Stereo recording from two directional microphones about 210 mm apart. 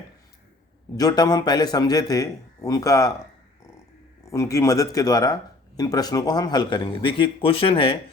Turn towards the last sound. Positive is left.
turn(degrees=25)  # may be behind; listen again after turning